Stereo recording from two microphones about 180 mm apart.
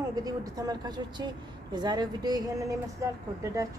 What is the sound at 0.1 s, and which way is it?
Speech, 20° right (ahead or behind).